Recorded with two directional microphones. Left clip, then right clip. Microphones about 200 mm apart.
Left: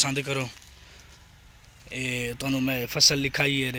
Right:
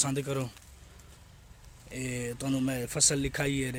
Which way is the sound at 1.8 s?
10° left (ahead or behind).